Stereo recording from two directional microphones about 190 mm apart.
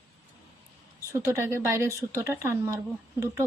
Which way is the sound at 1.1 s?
15° right (ahead or behind).